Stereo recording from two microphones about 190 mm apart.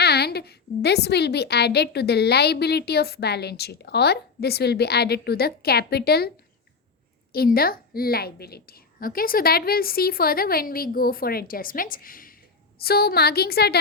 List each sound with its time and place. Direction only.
0.0 s a woman's voice: 60° left (ahead or behind)
7.3 s a woman's voice: 50° left (ahead or behind)